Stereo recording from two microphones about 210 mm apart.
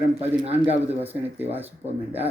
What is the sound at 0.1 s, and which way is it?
Speech, 30° right (ahead or behind).